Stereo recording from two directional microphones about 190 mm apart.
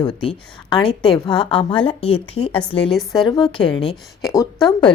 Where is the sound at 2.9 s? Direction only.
Centre (ahead or behind).